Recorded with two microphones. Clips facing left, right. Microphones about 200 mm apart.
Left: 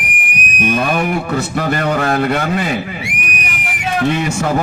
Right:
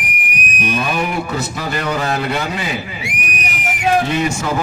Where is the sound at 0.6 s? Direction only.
50° left (ahead or behind).